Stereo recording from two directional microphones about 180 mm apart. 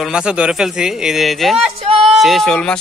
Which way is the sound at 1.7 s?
35° right (ahead or behind).